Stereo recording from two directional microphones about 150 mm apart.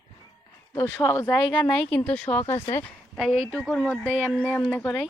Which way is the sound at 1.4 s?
30° left (ahead or behind).